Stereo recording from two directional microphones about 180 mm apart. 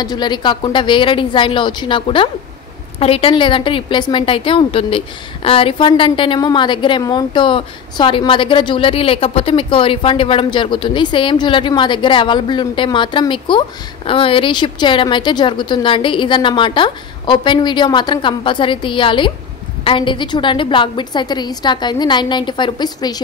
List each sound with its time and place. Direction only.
0.0 s a woman's voice: 25° left (ahead or behind)